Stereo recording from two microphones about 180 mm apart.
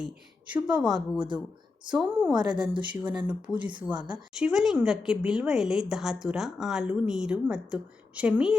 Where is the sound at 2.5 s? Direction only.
25° right (ahead or behind).